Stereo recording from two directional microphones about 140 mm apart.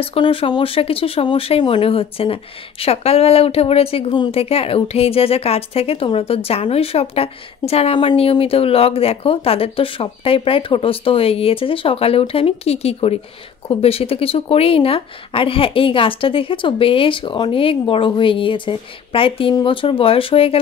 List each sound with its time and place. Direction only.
0.0 s speech: 40° left (ahead or behind)